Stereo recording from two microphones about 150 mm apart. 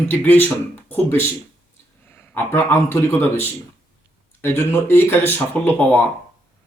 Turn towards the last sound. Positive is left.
turn(degrees=10)  # may be behind; listen again after turning